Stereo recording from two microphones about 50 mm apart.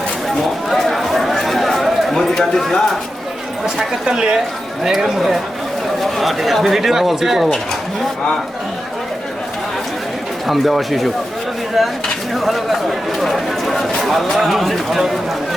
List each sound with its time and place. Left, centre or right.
0.7 s chatter: centre
4.0 s speech: centre
10.4 s speech: centre
12.3 s speech: centre